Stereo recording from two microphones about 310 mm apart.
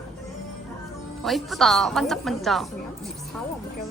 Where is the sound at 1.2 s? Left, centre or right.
Centre.